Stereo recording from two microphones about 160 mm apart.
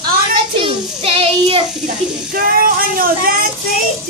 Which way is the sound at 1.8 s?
60° right (ahead or behind).